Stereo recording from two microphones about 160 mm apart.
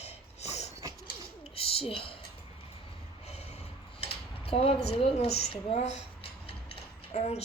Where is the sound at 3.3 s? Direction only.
40° left (ahead or behind).